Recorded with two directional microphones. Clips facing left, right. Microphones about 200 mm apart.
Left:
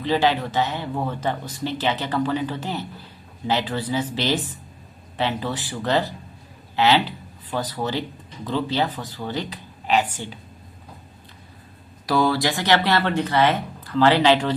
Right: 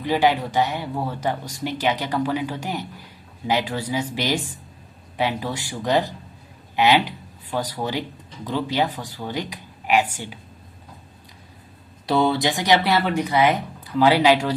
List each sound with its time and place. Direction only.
0.0 s speech: 15° right (ahead or behind)
12.0 s speech: 25° right (ahead or behind)